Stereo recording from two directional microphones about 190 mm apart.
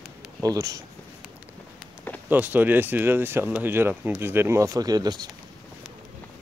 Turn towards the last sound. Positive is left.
turn(degrees=-20)  # may be behind; listen again after turning